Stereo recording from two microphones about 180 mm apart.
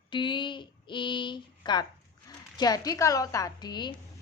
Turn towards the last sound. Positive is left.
turn(degrees=25)  # may be behind; listen again after turning